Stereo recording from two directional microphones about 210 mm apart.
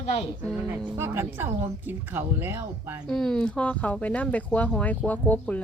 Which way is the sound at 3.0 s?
Centre (ahead or behind).